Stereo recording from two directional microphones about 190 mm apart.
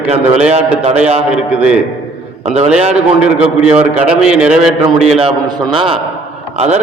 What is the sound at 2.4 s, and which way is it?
Speech, 35° right (ahead or behind).